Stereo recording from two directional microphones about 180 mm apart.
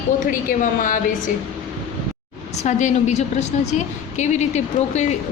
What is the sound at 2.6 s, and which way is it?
A woman's voice, 40° left (ahead or behind).